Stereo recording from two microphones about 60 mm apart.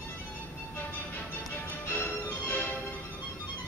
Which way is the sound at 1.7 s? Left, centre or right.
Left.